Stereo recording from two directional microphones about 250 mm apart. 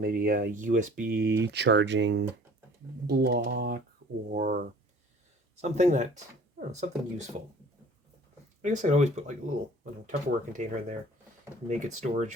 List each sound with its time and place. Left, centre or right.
0.0 s speech: right
4.3 s speech: right
5.6 s speech: right
8.6 s speech: right